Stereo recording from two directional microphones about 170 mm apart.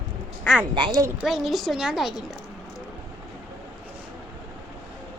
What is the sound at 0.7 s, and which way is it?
Speech, 25° right (ahead or behind).